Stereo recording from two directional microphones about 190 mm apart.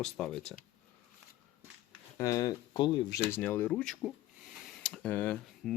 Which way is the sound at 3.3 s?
10° left (ahead or behind).